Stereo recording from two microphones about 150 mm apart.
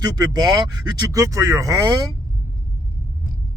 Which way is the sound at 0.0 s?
25° right (ahead or behind).